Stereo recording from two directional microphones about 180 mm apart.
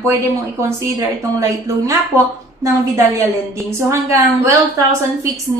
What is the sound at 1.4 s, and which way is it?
Speech, 20° right (ahead or behind).